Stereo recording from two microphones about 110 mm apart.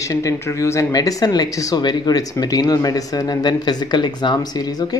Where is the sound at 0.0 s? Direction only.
30° left (ahead or behind).